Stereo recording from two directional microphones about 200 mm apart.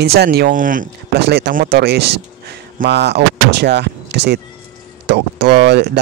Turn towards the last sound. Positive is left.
turn(degrees=-60)  # may be behind; listen again after turning